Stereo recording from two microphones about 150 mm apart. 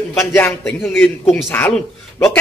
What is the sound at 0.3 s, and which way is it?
A man's voice, 10° left (ahead or behind).